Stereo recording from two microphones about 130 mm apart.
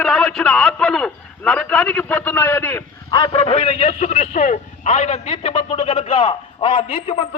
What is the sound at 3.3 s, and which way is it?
A man's voice, 55° left (ahead or behind).